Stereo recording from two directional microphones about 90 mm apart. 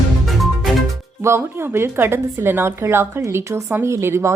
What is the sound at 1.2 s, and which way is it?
A woman's voice, 30° right (ahead or behind).